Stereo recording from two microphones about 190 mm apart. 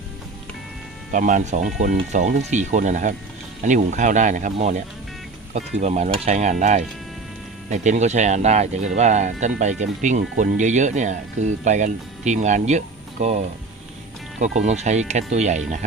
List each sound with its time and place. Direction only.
1.1 s speech: 45° right (ahead or behind)
14.6 s speech: 35° right (ahead or behind)